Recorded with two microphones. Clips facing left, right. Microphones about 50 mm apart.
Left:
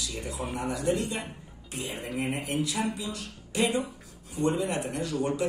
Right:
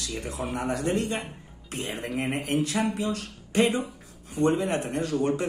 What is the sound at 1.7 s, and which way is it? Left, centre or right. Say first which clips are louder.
A man's voice: right 3 dB; right.